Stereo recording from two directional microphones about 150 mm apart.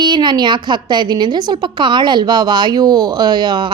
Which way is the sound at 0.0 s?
30° right (ahead or behind).